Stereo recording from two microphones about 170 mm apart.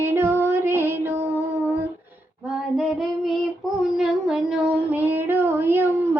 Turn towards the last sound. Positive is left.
turn(degrees=-15)  # may be behind; listen again after turning